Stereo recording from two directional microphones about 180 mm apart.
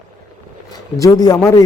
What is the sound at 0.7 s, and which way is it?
Speech, 20° left (ahead or behind).